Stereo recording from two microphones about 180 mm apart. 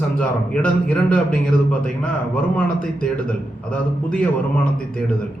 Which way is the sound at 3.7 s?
5° left (ahead or behind).